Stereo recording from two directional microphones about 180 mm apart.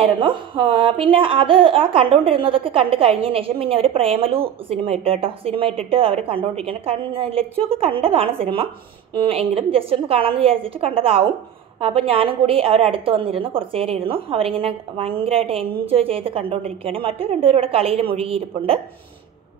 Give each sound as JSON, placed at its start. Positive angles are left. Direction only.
{"t": 0.0, "sound": "speech", "side_deg": -30}